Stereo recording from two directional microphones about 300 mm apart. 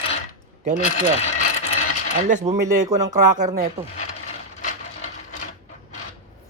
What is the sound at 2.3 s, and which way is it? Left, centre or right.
Speech, right.